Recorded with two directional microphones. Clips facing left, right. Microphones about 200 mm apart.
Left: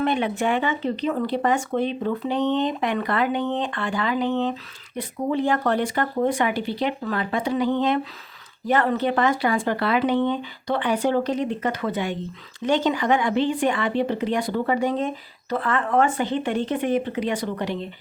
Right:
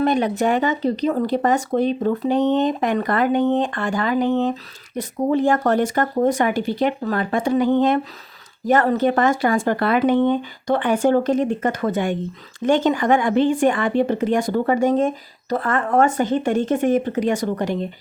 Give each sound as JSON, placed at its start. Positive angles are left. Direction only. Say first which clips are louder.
{"t": 0.0, "sound": "speech", "louder": "right 4 dB", "side_deg": -40}